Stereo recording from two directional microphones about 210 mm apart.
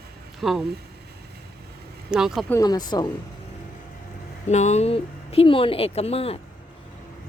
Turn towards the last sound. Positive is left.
turn(degrees=30)  # may be behind; listen again after turning